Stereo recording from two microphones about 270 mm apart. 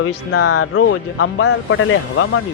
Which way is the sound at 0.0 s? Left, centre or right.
Left.